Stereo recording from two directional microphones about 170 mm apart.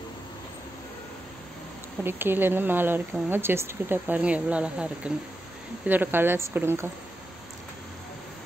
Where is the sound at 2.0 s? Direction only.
10° right (ahead or behind).